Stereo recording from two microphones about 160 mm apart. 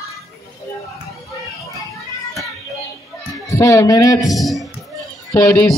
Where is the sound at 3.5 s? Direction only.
20° left (ahead or behind).